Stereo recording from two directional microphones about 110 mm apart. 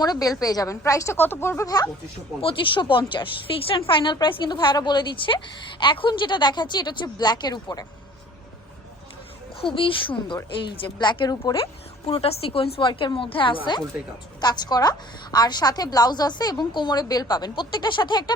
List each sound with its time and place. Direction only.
0.0 s a woman's voice: 35° left (ahead or behind)
1.6 s a woman's voice: 35° left (ahead or behind)
2.4 s a woman's voice: 50° left (ahead or behind)
9.6 s a woman's voice: 50° left (ahead or behind)
11.6 s a woman's voice: 60° left (ahead or behind)
14.4 s a woman's voice: 40° left (ahead or behind)